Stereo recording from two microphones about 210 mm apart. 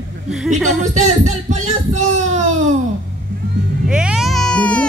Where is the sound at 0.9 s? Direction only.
35° right (ahead or behind).